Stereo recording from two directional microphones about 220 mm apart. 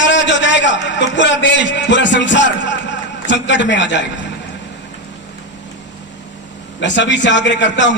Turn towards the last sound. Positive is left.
turn(degrees=55)  # may be behind; listen again after turning